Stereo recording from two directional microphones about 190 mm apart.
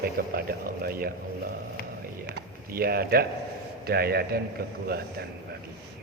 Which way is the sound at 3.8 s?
55° right (ahead or behind).